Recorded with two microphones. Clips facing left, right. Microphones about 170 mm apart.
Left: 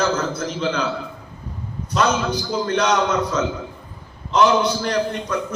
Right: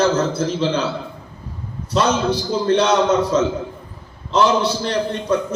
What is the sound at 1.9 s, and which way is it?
A man's voice, 30° right (ahead or behind).